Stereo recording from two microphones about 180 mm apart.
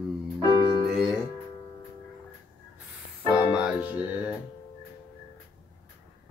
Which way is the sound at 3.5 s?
5° right (ahead or behind).